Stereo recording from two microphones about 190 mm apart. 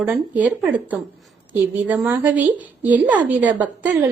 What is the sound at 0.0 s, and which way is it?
A woman's voice, 10° right (ahead or behind).